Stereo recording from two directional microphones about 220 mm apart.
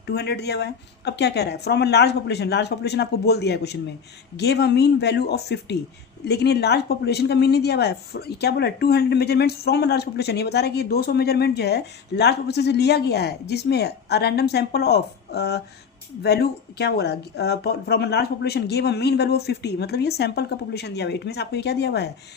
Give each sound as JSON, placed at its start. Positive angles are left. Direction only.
{"t": 0.0, "sound": "speech", "side_deg": 50}